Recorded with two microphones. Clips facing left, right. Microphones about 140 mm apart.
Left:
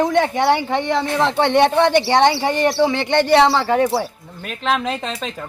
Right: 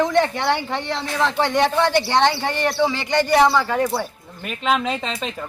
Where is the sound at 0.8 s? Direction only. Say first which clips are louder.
Left 6 dB; 55° left (ahead or behind).